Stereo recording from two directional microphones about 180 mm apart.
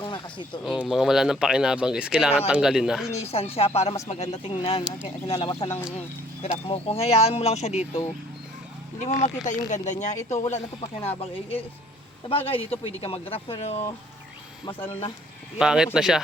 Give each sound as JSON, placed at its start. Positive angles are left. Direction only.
{"t": 0.0, "sound": "a sound", "side_deg": 25}
{"t": 0.6, "sound": "speech", "side_deg": 0}
{"t": 3.3, "sound": "speech", "side_deg": 35}
{"t": 4.8, "sound": "speech", "side_deg": -5}
{"t": 5.0, "sound": "speech", "side_deg": 30}
{"t": 15.5, "sound": "speech", "side_deg": -5}